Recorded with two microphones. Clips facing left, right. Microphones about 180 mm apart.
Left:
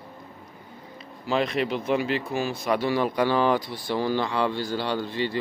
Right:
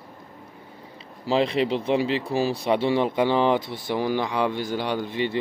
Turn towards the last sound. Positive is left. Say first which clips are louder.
# right 1 dB
turn(degrees=-20)  # may be behind; listen again after turning